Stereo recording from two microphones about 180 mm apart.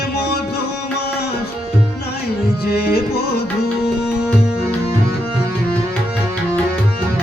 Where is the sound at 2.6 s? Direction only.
60° left (ahead or behind).